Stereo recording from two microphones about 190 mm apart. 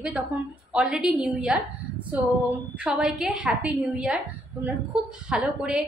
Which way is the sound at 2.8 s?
5° right (ahead or behind).